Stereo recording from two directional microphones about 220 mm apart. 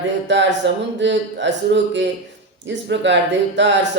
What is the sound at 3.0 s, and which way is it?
Speech, 55° right (ahead or behind).